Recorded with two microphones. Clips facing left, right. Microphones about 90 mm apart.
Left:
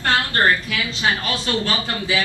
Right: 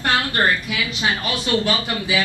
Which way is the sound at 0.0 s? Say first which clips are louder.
Left 1 dB; 20° right (ahead or behind).